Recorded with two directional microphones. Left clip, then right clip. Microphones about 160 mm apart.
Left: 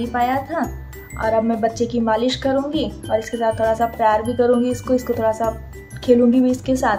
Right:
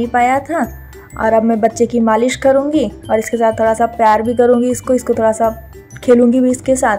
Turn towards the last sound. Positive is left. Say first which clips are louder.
# right 5 dB
turn(degrees=-30)  # may be behind; listen again after turning